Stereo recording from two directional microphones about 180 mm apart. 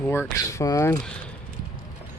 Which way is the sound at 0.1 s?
15° left (ahead or behind).